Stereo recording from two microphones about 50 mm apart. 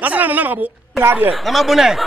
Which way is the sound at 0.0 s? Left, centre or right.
Right.